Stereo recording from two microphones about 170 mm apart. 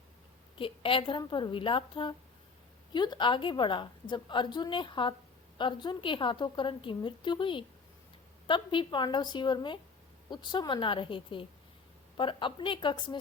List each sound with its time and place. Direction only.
0.6 s a woman's voice: 30° left (ahead or behind)